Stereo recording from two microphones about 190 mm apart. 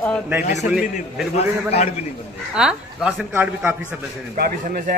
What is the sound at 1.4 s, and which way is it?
Speech, 35° left (ahead or behind).